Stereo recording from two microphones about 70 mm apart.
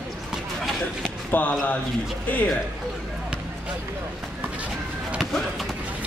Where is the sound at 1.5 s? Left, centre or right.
Centre.